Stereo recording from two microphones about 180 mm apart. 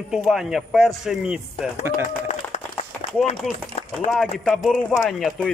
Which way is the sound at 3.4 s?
Centre (ahead or behind).